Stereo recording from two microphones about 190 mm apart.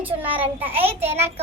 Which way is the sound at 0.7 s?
30° right (ahead or behind).